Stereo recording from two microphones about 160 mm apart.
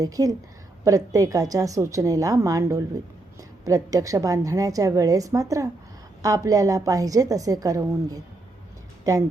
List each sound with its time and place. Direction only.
0.0 s a woman's voice: 20° right (ahead or behind)